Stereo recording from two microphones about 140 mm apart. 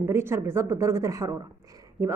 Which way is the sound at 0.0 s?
20° right (ahead or behind).